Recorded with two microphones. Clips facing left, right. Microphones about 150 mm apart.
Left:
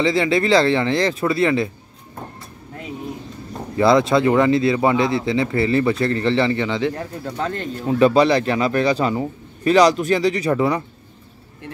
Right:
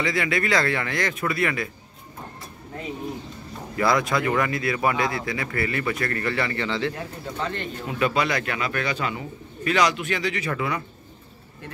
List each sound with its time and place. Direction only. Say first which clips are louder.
0.0 s speech: left 7 dB; 25° left (ahead or behind)
3.7 s speech: left 7 dB; 25° left (ahead or behind)
7.0 s speech: left 5 dB; 40° left (ahead or behind)